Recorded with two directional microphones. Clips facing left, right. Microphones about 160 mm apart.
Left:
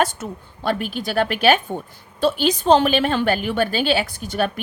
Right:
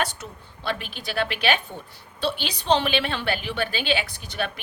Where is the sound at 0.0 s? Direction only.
50° left (ahead or behind).